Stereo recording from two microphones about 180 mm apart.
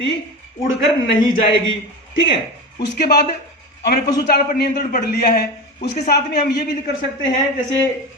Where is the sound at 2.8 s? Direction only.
60° left (ahead or behind).